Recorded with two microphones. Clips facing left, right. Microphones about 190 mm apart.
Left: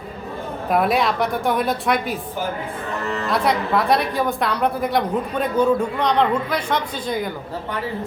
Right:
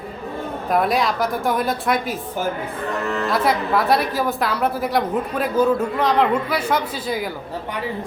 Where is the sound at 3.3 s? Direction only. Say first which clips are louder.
Left 1 dB; centre (ahead or behind).